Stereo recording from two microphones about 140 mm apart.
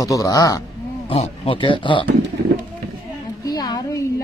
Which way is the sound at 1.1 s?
40° left (ahead or behind).